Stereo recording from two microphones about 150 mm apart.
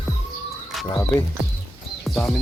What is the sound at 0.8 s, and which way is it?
Speech, 20° left (ahead or behind).